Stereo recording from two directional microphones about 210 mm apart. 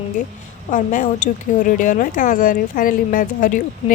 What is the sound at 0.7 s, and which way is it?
Speech, 40° left (ahead or behind).